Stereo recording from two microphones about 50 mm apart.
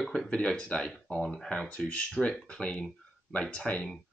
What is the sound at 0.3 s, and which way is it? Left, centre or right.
Speech, centre.